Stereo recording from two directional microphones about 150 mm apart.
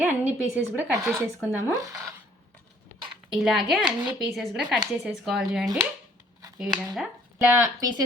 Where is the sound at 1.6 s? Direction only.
20° right (ahead or behind).